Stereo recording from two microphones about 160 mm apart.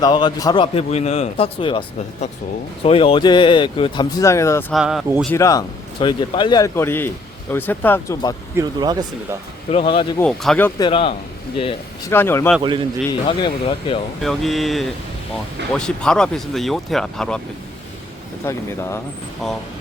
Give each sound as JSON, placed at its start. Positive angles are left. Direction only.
{"t": 0.0, "sound": "speech", "side_deg": 30}
{"t": 2.8, "sound": "speech", "side_deg": 35}
{"t": 4.7, "sound": "speech", "side_deg": -5}
{"t": 5.4, "sound": "speech", "side_deg": 20}
{"t": 6.7, "sound": "speech", "side_deg": 15}
{"t": 8.5, "sound": "speech", "side_deg": -25}
{"t": 9.7, "sound": "speech", "side_deg": 35}
{"t": 10.2, "sound": "speech", "side_deg": 5}
{"t": 10.8, "sound": "speech", "side_deg": 30}
{"t": 12.0, "sound": "speech", "side_deg": 15}
{"t": 13.1, "sound": "speech", "side_deg": 30}
{"t": 14.2, "sound": "speech", "side_deg": 0}
{"t": 18.4, "sound": "speech", "side_deg": 15}
{"t": 19.4, "sound": "speech", "side_deg": 0}